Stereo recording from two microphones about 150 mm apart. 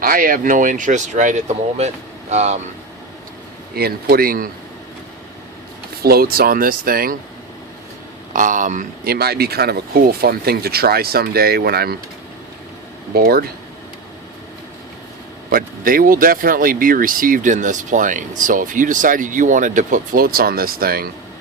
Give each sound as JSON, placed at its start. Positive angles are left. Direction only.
{"t": 0.0, "sound": "speech", "side_deg": -70}
{"t": 3.8, "sound": "speech", "side_deg": -90}
{"t": 6.0, "sound": "speech", "side_deg": -90}
{"t": 8.3, "sound": "speech", "side_deg": -60}
{"t": 13.1, "sound": "speech", "side_deg": -90}
{"t": 15.5, "sound": "speech", "side_deg": -75}